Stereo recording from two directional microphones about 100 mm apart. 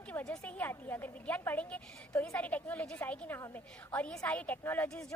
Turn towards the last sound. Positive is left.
turn(degrees=20)  # may be behind; listen again after turning